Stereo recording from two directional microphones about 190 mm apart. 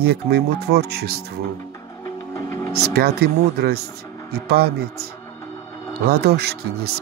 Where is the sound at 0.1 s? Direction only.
55° right (ahead or behind).